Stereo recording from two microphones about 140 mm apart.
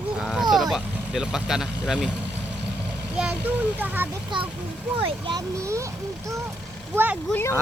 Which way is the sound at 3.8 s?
15° right (ahead or behind).